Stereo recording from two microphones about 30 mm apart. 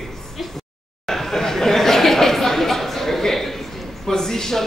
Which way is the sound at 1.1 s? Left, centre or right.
Centre.